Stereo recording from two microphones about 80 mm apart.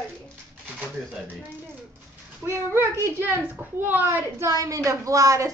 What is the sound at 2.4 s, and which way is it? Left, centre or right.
A woman's voice, right.